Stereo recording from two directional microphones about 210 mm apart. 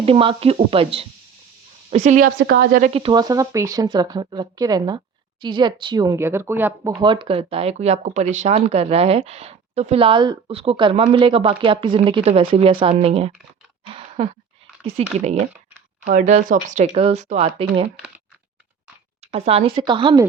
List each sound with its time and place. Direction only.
0.0 s speech: 25° right (ahead or behind)
2.4 s a woman's voice: 50° right (ahead or behind)
2.8 s speech: 25° right (ahead or behind); by 6.9 s 10° right (ahead or behind)
6.9 s speech: 20° right (ahead or behind)
13.8 s a sound: 25° right (ahead or behind)
14.9 s speech: 30° right (ahead or behind)
19.3 s speech: 30° right (ahead or behind)